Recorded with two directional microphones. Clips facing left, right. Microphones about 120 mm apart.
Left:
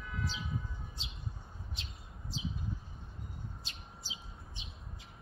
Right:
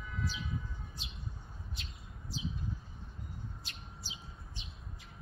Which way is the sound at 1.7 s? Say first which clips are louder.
Even; 25° left (ahead or behind).